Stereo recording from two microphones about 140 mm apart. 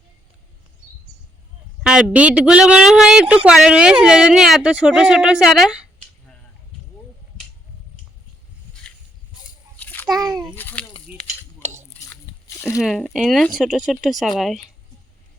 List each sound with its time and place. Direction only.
1.8 s speech: 5° right (ahead or behind)
9.7 s a sound: 10° left (ahead or behind)
10.1 s a sound: 25° right (ahead or behind)
10.5 s speech: 15° left (ahead or behind)
11.1 s cutlery: 10° right (ahead or behind)
11.9 s biting: 20° left (ahead or behind)
12.8 s speech: centre (ahead or behind)